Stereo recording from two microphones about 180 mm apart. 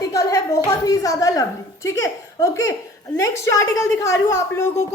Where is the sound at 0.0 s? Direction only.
20° left (ahead or behind).